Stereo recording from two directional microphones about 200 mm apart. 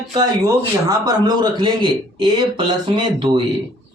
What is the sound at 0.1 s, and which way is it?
A man's voice, 20° right (ahead or behind).